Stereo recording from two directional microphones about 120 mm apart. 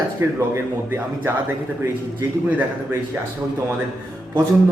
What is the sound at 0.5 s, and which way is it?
Speech, 20° right (ahead or behind).